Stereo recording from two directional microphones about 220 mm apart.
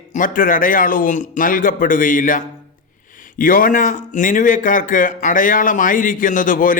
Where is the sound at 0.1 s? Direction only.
40° left (ahead or behind).